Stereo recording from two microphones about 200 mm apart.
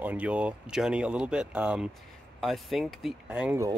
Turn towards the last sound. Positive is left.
turn(degrees=-10)  # may be behind; listen again after turning